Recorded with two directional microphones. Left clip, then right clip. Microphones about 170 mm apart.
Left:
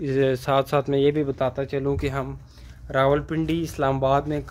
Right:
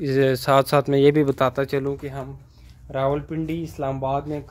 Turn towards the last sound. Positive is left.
turn(degrees=10)  # may be behind; listen again after turning